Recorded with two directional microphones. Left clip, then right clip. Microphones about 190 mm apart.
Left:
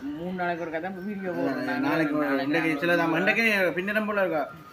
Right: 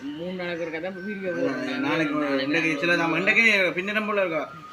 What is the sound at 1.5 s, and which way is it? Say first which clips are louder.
Speech: right 1 dB; centre (ahead or behind).